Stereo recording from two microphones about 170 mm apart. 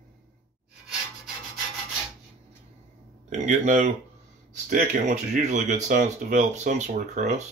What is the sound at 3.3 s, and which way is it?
Speech, 45° right (ahead or behind).